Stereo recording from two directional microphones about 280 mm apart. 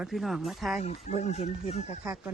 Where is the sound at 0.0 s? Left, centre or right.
Centre.